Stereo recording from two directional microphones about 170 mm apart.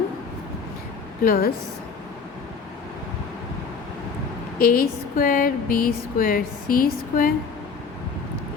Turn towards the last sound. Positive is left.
turn(degrees=60)  # may be behind; listen again after turning